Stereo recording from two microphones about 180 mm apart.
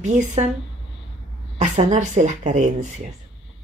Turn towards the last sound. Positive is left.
turn(degrees=-40)  # may be behind; listen again after turning